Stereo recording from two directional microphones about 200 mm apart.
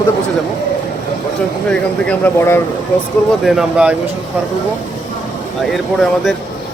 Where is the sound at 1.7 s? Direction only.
5° left (ahead or behind).